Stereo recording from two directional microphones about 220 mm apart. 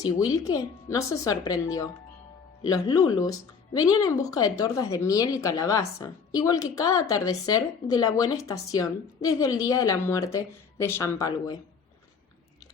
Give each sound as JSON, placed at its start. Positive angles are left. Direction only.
{"t": 0.9, "sound": "a woman's voice", "side_deg": 15}